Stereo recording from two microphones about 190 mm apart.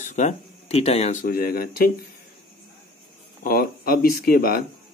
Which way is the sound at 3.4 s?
50° left (ahead or behind).